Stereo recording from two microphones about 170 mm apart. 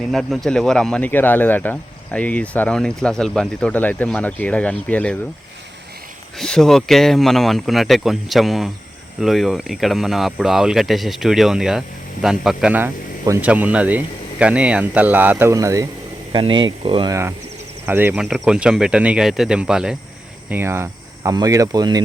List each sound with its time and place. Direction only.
0.1 s speech: centre (ahead or behind)
6.3 s speech: centre (ahead or behind); by 15.9 s 20° right (ahead or behind)
16.3 s speech: 30° right (ahead or behind)
17.8 s speech: 10° right (ahead or behind)